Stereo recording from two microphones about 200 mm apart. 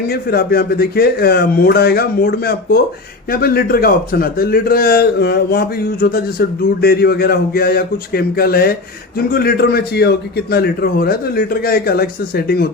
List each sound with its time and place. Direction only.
0.1 s a man's voice: 50° left (ahead or behind)